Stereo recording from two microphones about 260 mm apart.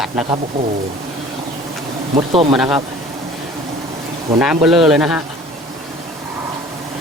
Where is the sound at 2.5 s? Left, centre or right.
Centre.